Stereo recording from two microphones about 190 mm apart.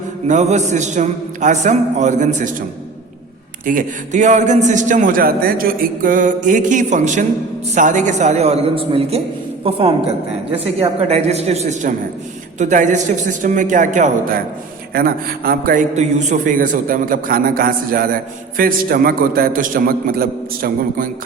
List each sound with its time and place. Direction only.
0.3 s a man's voice: 40° right (ahead or behind)
3.7 s a man's voice: 40° right (ahead or behind)